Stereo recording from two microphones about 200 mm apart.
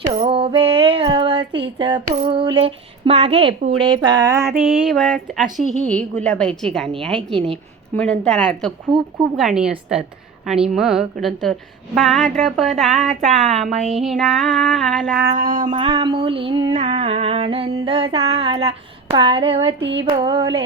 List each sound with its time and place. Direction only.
0.1 s female singing: 30° right (ahead or behind)
4.6 s a woman's voice: 5° right (ahead or behind)
7.3 s female singing: 30° right (ahead or behind)
8.2 s a woman's voice: 5° left (ahead or behind)
8.9 s female singing: 25° right (ahead or behind)
9.3 s a woman's voice: 5° right (ahead or behind)
15.2 s a sound: 50° right (ahead or behind)
15.8 s female singing: 25° right (ahead or behind)
19.8 s female singing: 65° right (ahead or behind)
20.1 s female singing: 20° right (ahead or behind)